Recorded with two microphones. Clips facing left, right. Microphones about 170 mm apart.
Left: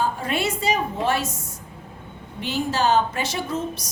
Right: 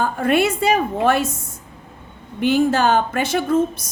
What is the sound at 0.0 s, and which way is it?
A woman's voice, 55° right (ahead or behind).